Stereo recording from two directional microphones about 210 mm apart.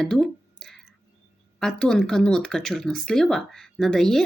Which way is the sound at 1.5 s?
5° left (ahead or behind).